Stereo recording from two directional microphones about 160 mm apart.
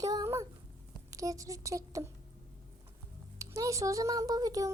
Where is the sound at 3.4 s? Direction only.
20° right (ahead or behind).